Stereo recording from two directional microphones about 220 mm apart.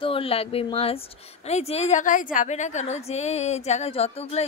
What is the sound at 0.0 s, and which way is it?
A woman's voice, 25° left (ahead or behind).